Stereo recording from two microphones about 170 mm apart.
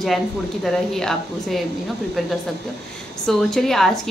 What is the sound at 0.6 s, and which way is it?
A woman's voice, centre (ahead or behind).